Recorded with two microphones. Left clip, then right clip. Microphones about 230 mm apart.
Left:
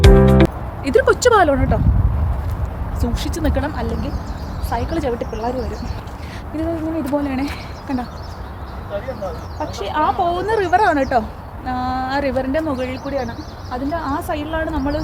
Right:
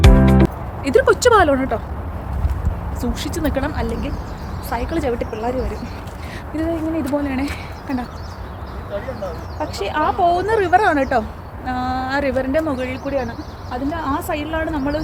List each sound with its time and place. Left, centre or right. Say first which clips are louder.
0.3 s speech: left 2 dB; centre
3.0 s speech: even; centre
6.6 s speech: right 1 dB; centre
9.6 s speech: left 1 dB; centre